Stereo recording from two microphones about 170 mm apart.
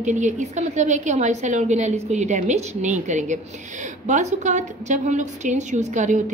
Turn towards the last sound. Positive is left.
turn(degrees=-45)  # may be behind; listen again after turning